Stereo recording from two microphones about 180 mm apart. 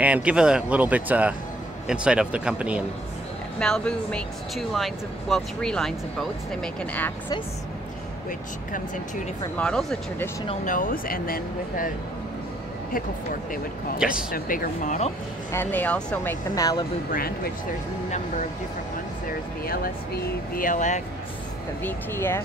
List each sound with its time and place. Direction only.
0.0 s speech: 5° right (ahead or behind)
3.5 s speech: 5° left (ahead or behind)
9.6 s speech: 5° left (ahead or behind)
10.6 s speech: 50° left (ahead or behind)
14.3 s speech: 50° left (ahead or behind)
15.5 s speech: 10° left (ahead or behind)
16.5 s speech: 20° left (ahead or behind)
19.6 s speech: 55° left (ahead or behind)
21.8 s speech: 15° left (ahead or behind)